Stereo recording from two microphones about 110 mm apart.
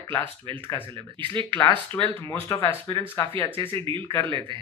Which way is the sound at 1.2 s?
50° right (ahead or behind).